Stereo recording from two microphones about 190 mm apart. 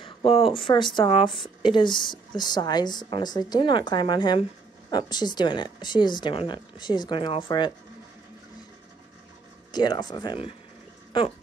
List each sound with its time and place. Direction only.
0.0 s a sound: 30° left (ahead or behind)
0.7 s speech: 25° left (ahead or behind)
9.7 s speech: 20° left (ahead or behind)